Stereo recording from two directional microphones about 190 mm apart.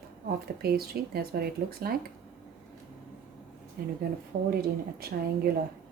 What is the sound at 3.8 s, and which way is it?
Speech, 55° right (ahead or behind).